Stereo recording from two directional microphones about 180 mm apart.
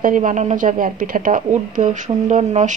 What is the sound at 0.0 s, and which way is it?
Speech, 45° right (ahead or behind).